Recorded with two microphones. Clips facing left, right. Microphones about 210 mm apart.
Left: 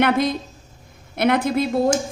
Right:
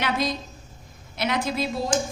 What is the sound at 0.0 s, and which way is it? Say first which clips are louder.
A woman's voice: left 7 dB; 55° left (ahead or behind).